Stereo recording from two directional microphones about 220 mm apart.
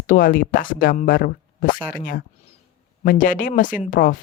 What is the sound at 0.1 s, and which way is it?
Speech, 40° left (ahead or behind).